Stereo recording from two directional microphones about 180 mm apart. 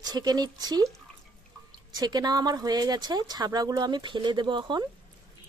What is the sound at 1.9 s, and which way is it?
Speech, 25° right (ahead or behind).